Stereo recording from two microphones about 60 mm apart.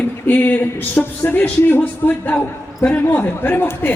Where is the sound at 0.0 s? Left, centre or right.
Left.